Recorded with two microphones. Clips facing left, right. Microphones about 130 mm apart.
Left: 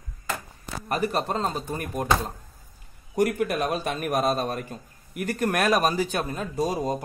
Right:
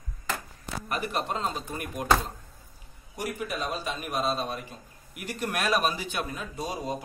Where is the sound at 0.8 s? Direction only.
40° left (ahead or behind).